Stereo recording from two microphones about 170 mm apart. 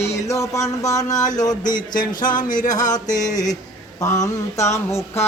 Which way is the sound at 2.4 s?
50° left (ahead or behind).